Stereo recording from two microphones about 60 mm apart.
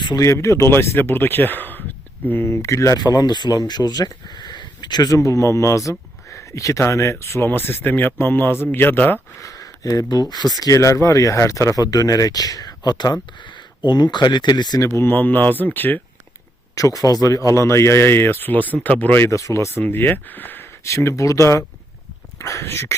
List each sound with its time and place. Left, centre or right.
0.2 s speech: left
2.3 s speech: left
5.0 s speech: left
9.4 s speech: left
14.8 s speech: left
15.2 s speech: left
16.7 s speech: left
19.2 s speech: left
19.7 s speech: left
20.8 s speech: left
22.4 s a sound: left
22.6 s speech: left